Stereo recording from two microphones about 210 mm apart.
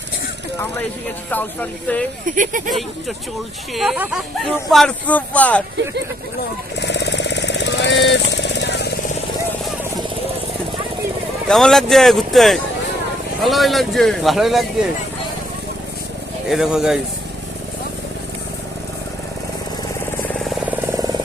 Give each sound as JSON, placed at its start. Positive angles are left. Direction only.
{"t": 1.9, "sound": "speech", "side_deg": 5}
{"t": 2.2, "sound": "speech", "side_deg": -40}
{"t": 2.6, "sound": "speech", "side_deg": 0}
{"t": 6.7, "sound": "jackhammer", "side_deg": 55}
{"t": 11.4, "sound": "speech", "side_deg": 5}
{"t": 16.5, "sound": "speech", "side_deg": 0}
{"t": 20.2, "sound": "vehicle", "side_deg": 0}